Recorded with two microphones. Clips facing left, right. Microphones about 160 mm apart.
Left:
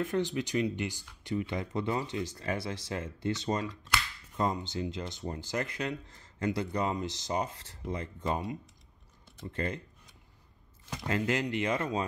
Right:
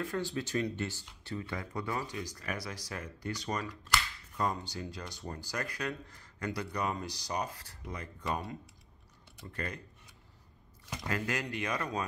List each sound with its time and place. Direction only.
0.0 s speech: 20° left (ahead or behind)
11.1 s speech: 25° left (ahead or behind)